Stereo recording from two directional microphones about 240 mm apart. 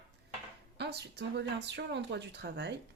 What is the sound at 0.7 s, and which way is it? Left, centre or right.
Speech, right.